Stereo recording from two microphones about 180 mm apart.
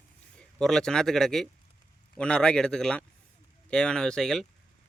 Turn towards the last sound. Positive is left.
turn(degrees=5)  # may be behind; listen again after turning